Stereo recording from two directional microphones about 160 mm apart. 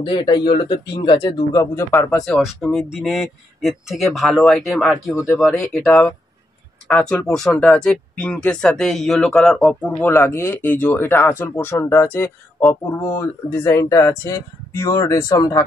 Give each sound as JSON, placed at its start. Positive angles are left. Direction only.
{"t": 0.0, "sound": "speech", "side_deg": 30}
{"t": 2.1, "sound": "speech", "side_deg": 0}